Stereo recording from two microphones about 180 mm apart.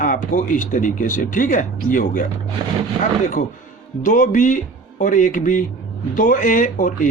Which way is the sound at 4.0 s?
45° left (ahead or behind).